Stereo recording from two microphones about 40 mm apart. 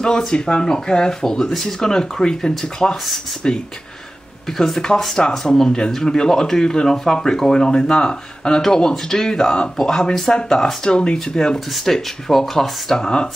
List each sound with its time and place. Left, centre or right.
0.0 s speech: centre
4.5 s speech: centre
11.7 s speech: centre
12.9 s speech: centre